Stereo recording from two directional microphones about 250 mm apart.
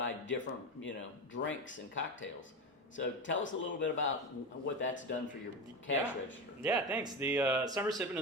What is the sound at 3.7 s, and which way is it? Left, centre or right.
Speech, left.